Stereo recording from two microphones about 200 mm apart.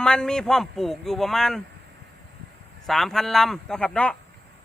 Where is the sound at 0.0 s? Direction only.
5° left (ahead or behind).